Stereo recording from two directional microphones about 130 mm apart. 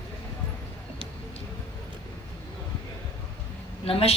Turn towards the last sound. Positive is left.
turn(degrees=45)  # may be behind; listen again after turning